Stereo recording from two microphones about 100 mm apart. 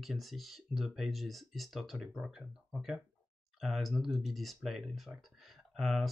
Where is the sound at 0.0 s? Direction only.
Centre (ahead or behind).